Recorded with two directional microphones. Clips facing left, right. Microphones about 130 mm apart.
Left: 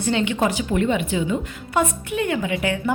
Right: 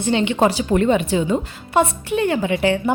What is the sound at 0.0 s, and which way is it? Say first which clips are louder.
A woman's voice: right 4 dB; 20° right (ahead or behind).